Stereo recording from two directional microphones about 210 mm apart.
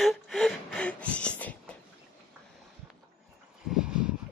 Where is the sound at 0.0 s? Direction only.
Centre (ahead or behind).